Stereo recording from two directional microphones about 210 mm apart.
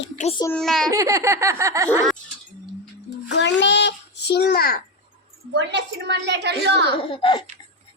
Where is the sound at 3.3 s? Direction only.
60° left (ahead or behind).